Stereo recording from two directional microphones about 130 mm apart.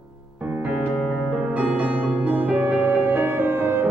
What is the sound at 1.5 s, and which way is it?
Music, 10° right (ahead or behind).